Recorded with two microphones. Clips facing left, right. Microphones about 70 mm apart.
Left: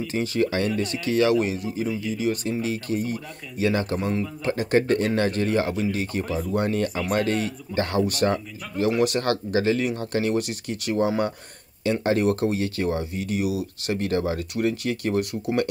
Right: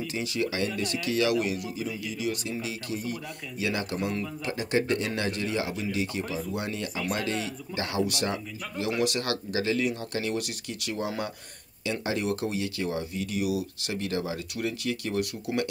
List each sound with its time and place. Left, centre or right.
0.1 s speech: left
6.2 s speech: centre
6.5 s speech: left